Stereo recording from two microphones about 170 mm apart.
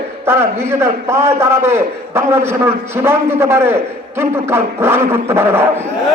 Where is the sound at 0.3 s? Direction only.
15° right (ahead or behind).